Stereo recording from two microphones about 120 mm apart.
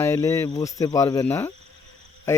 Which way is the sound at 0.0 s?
25° left (ahead or behind).